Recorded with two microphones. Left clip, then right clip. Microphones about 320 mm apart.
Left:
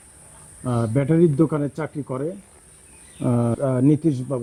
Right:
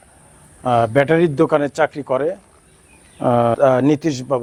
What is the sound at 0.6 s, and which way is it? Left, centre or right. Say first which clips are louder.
Speech: right 10 dB; right.